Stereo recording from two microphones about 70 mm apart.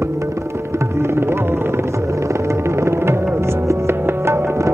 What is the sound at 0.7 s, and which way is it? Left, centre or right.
Music, right.